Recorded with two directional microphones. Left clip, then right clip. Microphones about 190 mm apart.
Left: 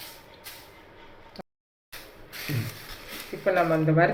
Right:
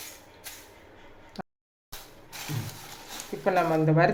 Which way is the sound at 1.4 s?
30° right (ahead or behind).